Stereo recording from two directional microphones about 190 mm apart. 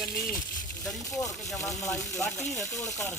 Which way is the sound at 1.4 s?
Centre (ahead or behind).